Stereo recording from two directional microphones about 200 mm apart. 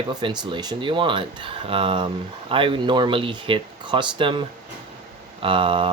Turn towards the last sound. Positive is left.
turn(degrees=-25)  # may be behind; listen again after turning